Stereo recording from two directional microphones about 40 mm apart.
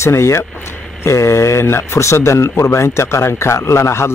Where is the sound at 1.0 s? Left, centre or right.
Left.